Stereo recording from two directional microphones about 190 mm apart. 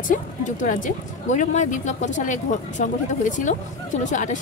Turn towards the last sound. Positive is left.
turn(degrees=40)  # may be behind; listen again after turning